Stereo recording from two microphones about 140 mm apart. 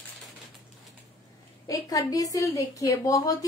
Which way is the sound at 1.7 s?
25° left (ahead or behind).